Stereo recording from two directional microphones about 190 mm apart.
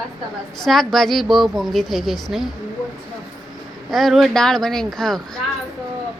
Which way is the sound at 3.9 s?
Centre (ahead or behind).